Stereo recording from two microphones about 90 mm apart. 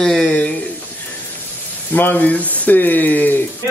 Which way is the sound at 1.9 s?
20° left (ahead or behind).